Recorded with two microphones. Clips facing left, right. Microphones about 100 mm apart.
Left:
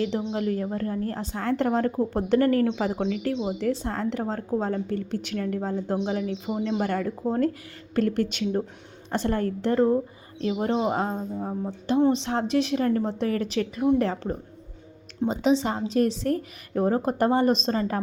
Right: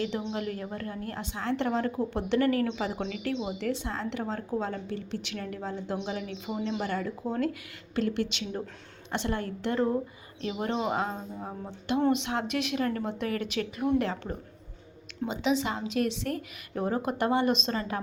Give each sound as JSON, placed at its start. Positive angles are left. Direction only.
{"t": 0.3, "sound": "a woman's voice", "side_deg": 35}
{"t": 11.3, "sound": "speech", "side_deg": 15}
{"t": 12.1, "sound": "a woman's voice", "side_deg": 35}